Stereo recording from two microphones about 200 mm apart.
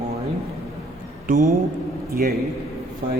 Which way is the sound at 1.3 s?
45° right (ahead or behind).